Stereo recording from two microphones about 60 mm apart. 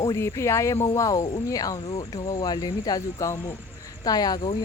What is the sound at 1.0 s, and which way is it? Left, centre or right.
Speech, left.